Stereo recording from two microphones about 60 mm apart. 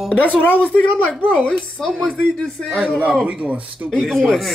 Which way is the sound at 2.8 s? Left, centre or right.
Right.